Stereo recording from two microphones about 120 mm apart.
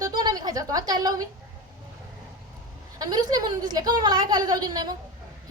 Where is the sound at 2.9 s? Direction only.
35° right (ahead or behind).